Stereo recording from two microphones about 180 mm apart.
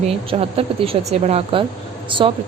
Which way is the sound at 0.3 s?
30° right (ahead or behind).